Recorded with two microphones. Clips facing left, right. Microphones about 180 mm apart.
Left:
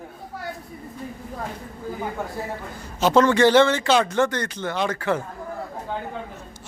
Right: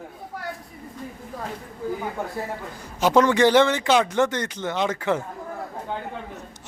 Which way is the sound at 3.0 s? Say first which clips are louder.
Left 1 dB; 15° right (ahead or behind).